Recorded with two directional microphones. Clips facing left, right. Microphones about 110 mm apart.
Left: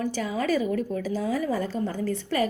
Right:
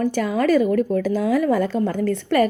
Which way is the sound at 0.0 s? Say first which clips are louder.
Right 7 dB; 60° right (ahead or behind).